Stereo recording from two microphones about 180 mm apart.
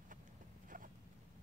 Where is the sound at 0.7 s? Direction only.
45° right (ahead or behind).